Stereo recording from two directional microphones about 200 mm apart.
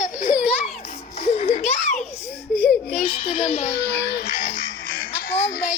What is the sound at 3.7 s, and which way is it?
Music, 50° left (ahead or behind).